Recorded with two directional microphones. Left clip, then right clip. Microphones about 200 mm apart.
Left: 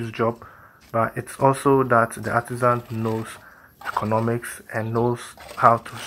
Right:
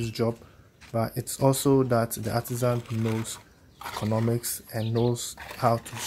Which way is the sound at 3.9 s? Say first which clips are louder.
Left 7 dB; 40° right (ahead or behind).